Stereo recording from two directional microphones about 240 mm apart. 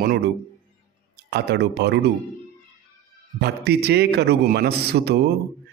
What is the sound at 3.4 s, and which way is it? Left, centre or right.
A man's voice, right.